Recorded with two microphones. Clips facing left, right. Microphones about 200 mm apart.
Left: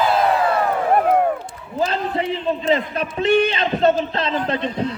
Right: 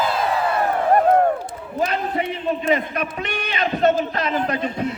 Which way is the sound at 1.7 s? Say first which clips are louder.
Left 1 dB; 30° left (ahead or behind).